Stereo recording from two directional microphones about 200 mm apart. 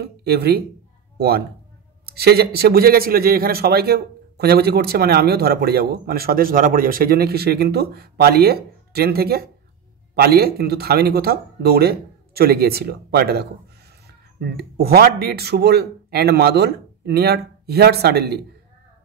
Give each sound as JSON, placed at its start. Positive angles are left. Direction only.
{"t": 0.0, "sound": "a man's voice", "side_deg": -50}